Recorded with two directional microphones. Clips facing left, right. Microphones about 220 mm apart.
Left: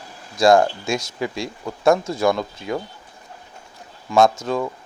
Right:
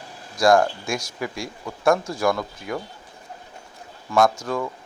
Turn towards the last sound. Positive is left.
turn(degrees=25)  # may be behind; listen again after turning